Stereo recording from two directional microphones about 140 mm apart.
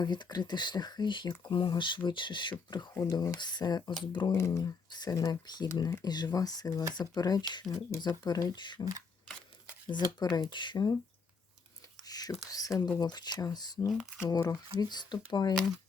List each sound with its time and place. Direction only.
0.0 s speech: 30° left (ahead or behind)
4.4 s speech: 20° left (ahead or behind)
9.9 s speech: 30° left (ahead or behind)
12.0 s whispering: 25° left (ahead or behind)
12.5 s speech: 25° left (ahead or behind)
13.9 s speech: centre (ahead or behind)
14.2 s speech: 25° left (ahead or behind)